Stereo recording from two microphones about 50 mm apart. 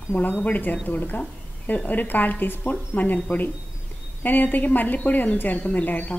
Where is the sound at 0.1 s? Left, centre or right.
Left.